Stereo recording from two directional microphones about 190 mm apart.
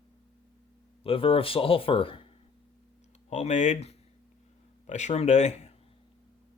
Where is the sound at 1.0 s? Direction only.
30° left (ahead or behind).